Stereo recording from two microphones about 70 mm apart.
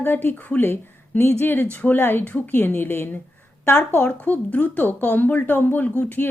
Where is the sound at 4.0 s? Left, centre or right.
Left.